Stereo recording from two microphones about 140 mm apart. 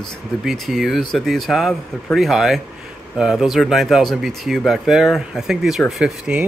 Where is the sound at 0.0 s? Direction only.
Centre (ahead or behind).